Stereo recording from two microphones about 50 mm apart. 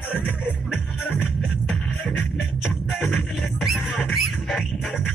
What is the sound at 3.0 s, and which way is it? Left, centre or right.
Music, left.